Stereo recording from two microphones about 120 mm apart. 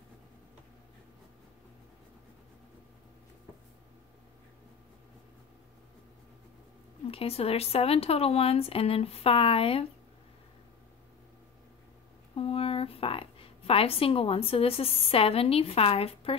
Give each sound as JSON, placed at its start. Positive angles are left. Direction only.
{"t": 7.1, "sound": "speech", "side_deg": 55}
{"t": 12.4, "sound": "a woman's voice", "side_deg": 55}